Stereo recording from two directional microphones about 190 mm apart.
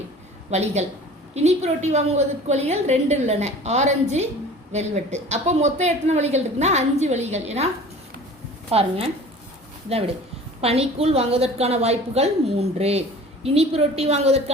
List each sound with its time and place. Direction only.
0.5 s a woman's voice: 35° right (ahead or behind)
8.7 s a woman's voice: 30° right (ahead or behind)
10.6 s a woman's voice: 30° right (ahead or behind)